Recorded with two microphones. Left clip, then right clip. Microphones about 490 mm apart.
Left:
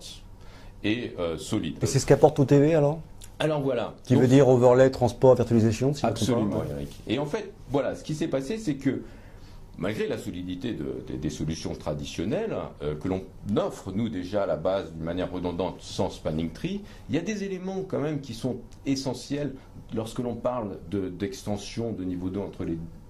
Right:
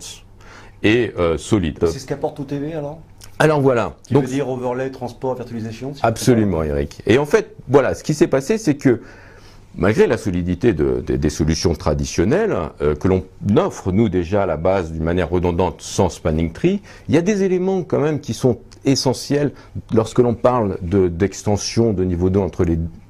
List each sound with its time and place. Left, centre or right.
0.8 s speech: right
2.0 s speech: left
3.3 s speech: right
4.4 s speech: left
5.9 s speech: right